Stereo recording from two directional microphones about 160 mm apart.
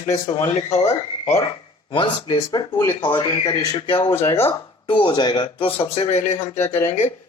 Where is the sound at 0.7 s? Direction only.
40° left (ahead or behind).